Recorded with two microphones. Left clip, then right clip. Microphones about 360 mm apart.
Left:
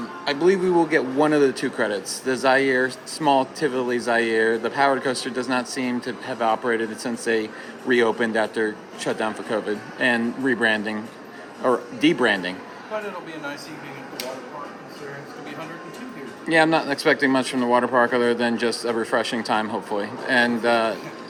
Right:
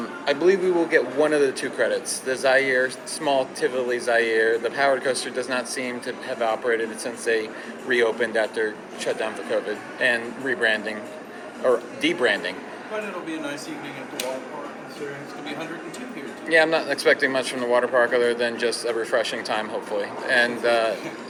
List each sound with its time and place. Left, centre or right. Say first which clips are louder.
0.3 s a man's voice: even; centre
11.6 s a man's voice: left 1 dB; left
16.5 s a man's voice: left 1 dB; left